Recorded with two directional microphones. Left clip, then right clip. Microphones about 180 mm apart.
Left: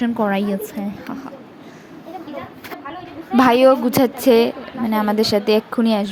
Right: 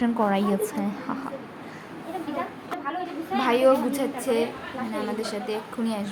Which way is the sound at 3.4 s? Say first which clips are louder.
Left 8 dB; 55° left (ahead or behind).